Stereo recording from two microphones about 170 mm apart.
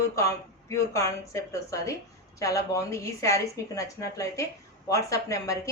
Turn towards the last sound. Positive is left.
turn(degrees=20)  # may be behind; listen again after turning